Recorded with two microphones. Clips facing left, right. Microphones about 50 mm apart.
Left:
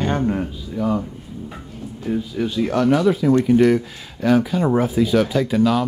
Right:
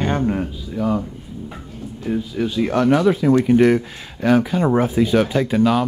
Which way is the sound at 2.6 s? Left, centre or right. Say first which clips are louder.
Right 1 dB; right.